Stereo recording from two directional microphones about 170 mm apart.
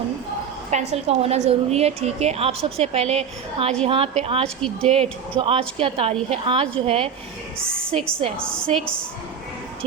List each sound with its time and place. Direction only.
0.7 s a woman's voice: 40° right (ahead or behind)
4.4 s speech: 5° left (ahead or behind)
5.3 s a woman's voice: 30° right (ahead or behind)
8.2 s a woman's voice: 35° right (ahead or behind)